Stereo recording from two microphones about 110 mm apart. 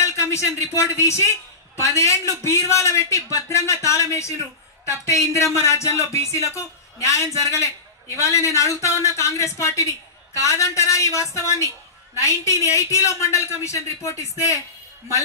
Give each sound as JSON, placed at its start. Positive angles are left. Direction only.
{"t": 0.0, "sound": "a man's voice", "side_deg": 25}